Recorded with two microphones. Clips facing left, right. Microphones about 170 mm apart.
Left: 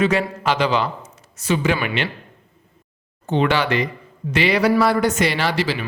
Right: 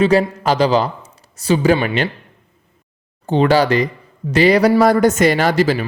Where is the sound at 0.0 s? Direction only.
35° right (ahead or behind).